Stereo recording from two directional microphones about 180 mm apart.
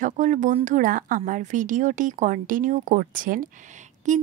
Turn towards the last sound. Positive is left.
turn(degrees=-45)  # may be behind; listen again after turning